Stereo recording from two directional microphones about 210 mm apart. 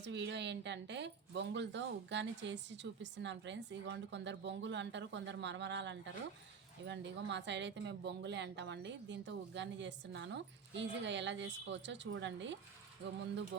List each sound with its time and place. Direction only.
0.0 s speech: 55° right (ahead or behind)